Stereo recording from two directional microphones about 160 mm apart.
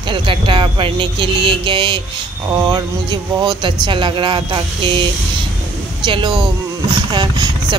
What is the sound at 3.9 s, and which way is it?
Speech, 30° right (ahead or behind).